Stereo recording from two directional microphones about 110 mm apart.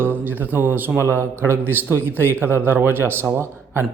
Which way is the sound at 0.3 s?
15° right (ahead or behind).